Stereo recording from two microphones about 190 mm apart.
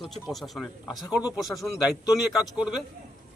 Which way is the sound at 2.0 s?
20° left (ahead or behind).